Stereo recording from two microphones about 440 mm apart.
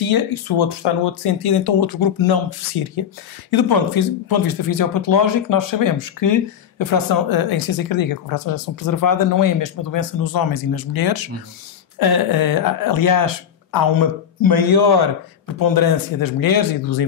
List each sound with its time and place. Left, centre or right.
0.0 s speech: left